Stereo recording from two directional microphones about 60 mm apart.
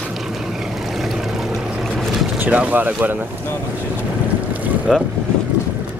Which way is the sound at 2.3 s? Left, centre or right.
Right.